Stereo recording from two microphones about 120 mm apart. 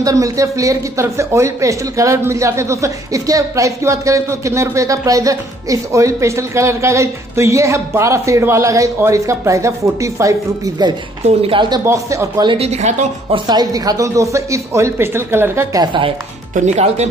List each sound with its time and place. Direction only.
0.0 s speech: 30° right (ahead or behind)
11.2 s a woman's voice: 55° right (ahead or behind)
11.8 s speech: 25° right (ahead or behind)
12.5 s speech: 65° right (ahead or behind)
13.3 s speech: 35° right (ahead or behind)
15.7 s speech: 40° right (ahead or behind)
16.6 s speech: 70° right (ahead or behind)